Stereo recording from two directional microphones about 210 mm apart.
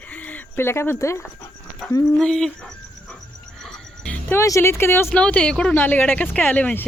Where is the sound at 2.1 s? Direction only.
5° left (ahead or behind).